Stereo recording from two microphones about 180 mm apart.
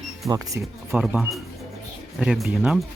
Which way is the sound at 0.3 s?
15° right (ahead or behind).